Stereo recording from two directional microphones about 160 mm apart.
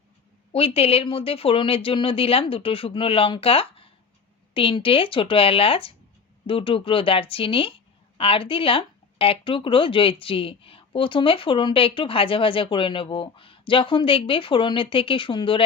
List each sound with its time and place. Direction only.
0.5 s speech: 35° left (ahead or behind)